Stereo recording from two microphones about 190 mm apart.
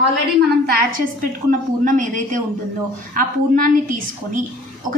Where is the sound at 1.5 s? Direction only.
40° right (ahead or behind).